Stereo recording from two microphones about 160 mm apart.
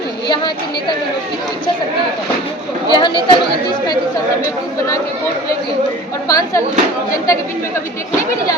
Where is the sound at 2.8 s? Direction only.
30° left (ahead or behind).